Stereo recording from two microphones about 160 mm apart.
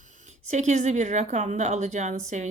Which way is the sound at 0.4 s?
50° right (ahead or behind).